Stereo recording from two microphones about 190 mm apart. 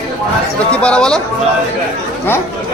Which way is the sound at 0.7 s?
5° left (ahead or behind).